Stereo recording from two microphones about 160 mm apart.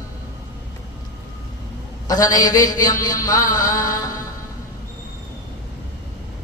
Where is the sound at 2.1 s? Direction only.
25° left (ahead or behind).